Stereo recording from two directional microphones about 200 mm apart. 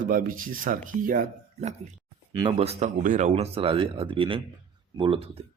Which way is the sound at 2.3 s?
25° right (ahead or behind).